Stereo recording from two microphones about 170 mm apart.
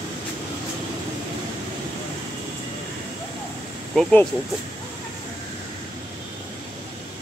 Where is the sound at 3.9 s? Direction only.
5° left (ahead or behind).